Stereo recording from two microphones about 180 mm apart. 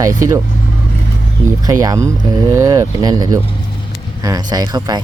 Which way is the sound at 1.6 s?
20° right (ahead or behind).